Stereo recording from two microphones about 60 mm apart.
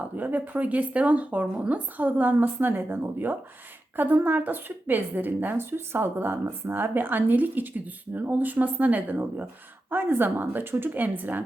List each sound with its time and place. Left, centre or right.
0.2 s a woman's voice: right